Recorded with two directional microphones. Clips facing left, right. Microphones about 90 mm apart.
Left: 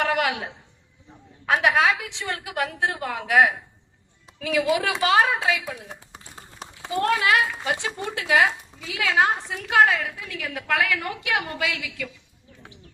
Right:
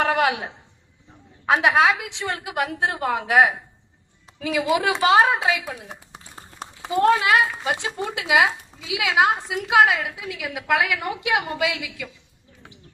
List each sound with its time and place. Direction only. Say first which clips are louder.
0.0 s a sound: right 3 dB; 30° right (ahead or behind)
1.5 s a woman's voice: right 2 dB; 25° right (ahead or behind)
6.9 s speech: right 4 dB; 25° right (ahead or behind)